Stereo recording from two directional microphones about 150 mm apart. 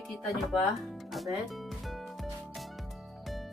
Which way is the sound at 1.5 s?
Centre (ahead or behind).